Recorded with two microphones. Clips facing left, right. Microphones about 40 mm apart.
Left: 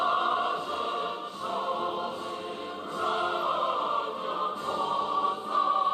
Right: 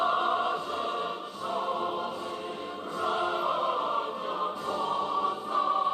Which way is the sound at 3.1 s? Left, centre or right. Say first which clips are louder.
Even; centre.